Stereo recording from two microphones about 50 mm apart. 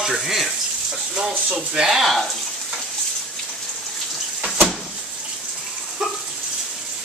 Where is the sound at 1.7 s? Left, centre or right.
Centre.